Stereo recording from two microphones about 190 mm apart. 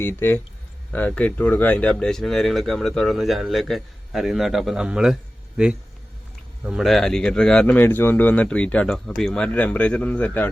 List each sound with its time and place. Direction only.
0.0 s speech: 10° left (ahead or behind); by 5.1 s 5° right (ahead or behind)
6.7 s speech: centre (ahead or behind)